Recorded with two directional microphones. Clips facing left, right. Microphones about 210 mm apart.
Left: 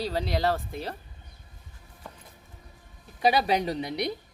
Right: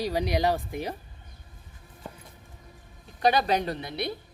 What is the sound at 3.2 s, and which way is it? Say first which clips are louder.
Speech: even; 10° left (ahead or behind).